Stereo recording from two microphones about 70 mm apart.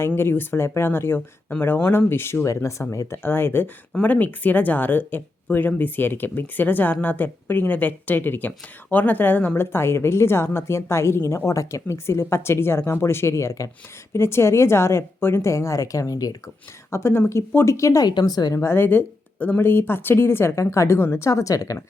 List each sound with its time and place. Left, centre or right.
0.2 s speech: left
3.1 s speech: left
14.1 s a woman's voice: left
16.9 s speech: left
17.7 s a woman's voice: left
18.0 s speech: left
18.5 s speech: left
21.2 s speech: left